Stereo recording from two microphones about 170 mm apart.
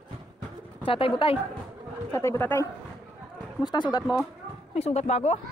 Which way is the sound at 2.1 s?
15° left (ahead or behind).